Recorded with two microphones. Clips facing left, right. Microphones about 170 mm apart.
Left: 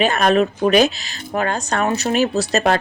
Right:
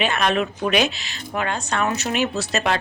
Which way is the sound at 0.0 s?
40° left (ahead or behind).